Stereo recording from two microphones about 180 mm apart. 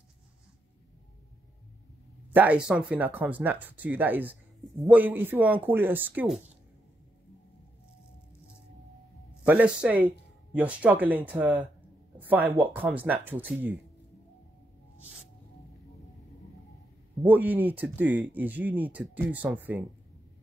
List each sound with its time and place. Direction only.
2.3 s speech: 5° right (ahead or behind)
9.5 s speech: 10° right (ahead or behind)
17.2 s speech: 10° right (ahead or behind)